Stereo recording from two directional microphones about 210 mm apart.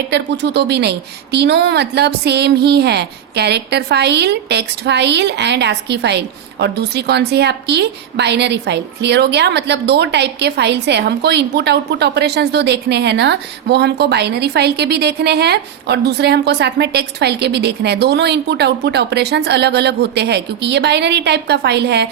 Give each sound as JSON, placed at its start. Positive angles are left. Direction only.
{"t": 0.1, "sound": "a woman's voice", "side_deg": -55}